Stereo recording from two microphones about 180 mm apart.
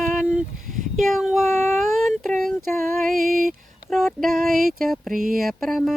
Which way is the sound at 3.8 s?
Centre (ahead or behind).